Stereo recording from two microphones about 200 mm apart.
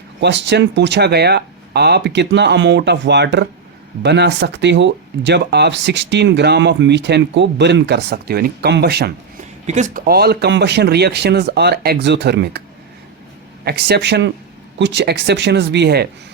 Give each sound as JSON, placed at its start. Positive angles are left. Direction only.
{"t": 0.2, "sound": "speech", "side_deg": -60}
{"t": 9.6, "sound": "speech", "side_deg": -35}
{"t": 13.7, "sound": "speech", "side_deg": -55}